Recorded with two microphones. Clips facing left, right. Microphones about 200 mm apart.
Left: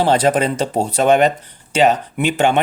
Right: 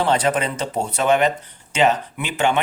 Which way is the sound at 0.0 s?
35° left (ahead or behind).